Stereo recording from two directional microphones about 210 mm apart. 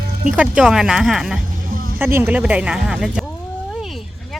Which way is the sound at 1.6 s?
45° right (ahead or behind).